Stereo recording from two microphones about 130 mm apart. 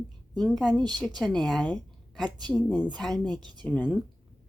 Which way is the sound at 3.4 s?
35° right (ahead or behind).